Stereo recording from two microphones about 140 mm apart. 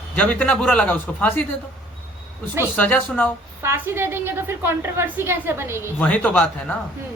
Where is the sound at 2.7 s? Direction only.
15° left (ahead or behind).